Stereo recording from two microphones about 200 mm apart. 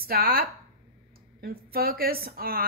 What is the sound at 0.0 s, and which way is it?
A woman's voice, 50° right (ahead or behind).